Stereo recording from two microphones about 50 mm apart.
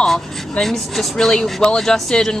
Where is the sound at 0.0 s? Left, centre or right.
Centre.